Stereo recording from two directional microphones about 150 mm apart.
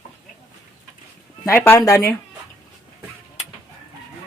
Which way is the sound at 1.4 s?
15° left (ahead or behind).